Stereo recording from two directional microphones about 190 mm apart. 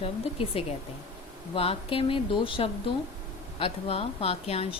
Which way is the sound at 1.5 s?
30° left (ahead or behind).